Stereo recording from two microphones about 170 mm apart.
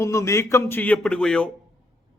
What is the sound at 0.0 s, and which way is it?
A man's voice, 15° left (ahead or behind).